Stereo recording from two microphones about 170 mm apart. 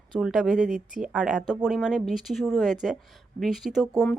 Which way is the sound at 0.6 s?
50° right (ahead or behind).